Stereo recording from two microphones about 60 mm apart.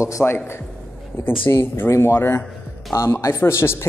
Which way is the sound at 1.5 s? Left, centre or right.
Left.